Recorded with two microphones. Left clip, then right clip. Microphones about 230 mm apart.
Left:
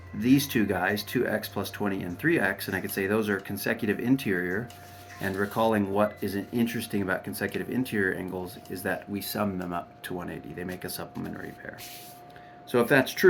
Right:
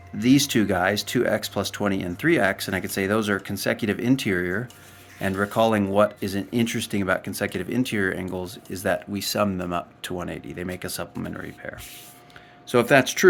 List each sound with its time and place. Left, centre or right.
0.2 s speech: right
12.7 s speech: right